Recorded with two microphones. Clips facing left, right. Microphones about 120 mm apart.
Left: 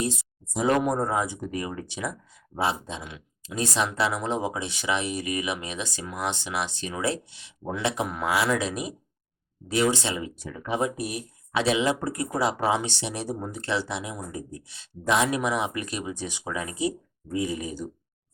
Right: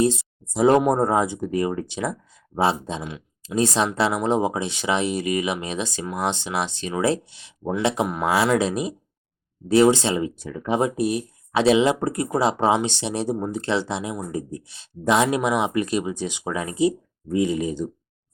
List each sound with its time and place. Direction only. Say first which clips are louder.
0.0 s speech: right 9 dB; 30° right (ahead or behind)